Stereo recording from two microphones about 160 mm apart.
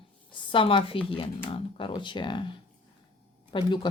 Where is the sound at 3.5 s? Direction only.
30° left (ahead or behind).